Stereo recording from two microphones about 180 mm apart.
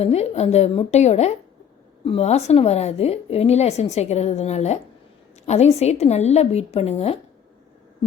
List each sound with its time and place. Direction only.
0.0 s a woman's voice: 35° left (ahead or behind)